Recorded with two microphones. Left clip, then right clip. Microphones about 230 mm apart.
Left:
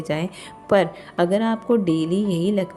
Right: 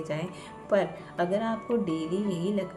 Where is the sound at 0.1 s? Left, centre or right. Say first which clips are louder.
Left 7 dB; left.